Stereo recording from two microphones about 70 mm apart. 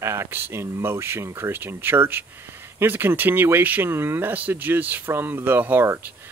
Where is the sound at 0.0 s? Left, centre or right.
Right.